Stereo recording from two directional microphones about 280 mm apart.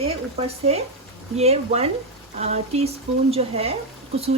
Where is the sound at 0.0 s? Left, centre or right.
Right.